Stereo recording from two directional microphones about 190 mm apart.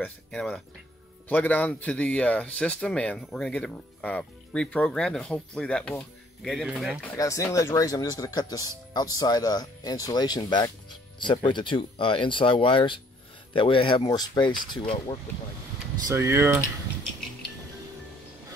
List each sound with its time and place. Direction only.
0.0 s speech: 5° left (ahead or behind)
7.2 s speech: 15° left (ahead or behind)
16.1 s speech: 15° right (ahead or behind)